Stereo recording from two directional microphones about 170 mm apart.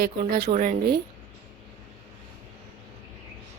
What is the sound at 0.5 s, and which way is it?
Speech, 45° right (ahead or behind).